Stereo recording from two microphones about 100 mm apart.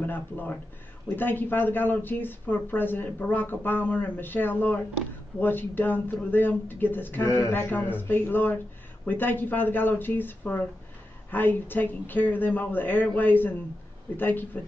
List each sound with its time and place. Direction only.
0.0 s speech: 20° left (ahead or behind)